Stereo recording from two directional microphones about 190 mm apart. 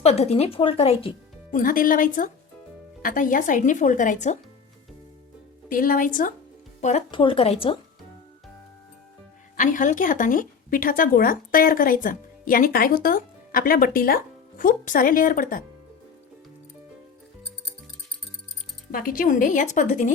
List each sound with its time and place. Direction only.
0.0 s a woman's voice: 35° left (ahead or behind)
1.5 s speech: 45° left (ahead or behind)
5.6 s speech: 45° left (ahead or behind)
6.8 s speech: 30° left (ahead or behind)
9.6 s speech: 45° left (ahead or behind)
18.9 s speech: 50° left (ahead or behind)